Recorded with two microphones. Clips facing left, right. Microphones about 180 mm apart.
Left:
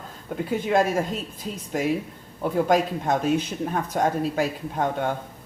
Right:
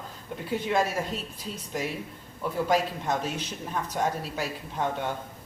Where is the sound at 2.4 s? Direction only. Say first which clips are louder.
Left 5 dB; 50° left (ahead or behind).